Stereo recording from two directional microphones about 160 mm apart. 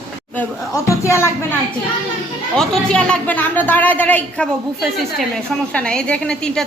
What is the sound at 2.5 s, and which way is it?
A woman's voice, 5° left (ahead or behind).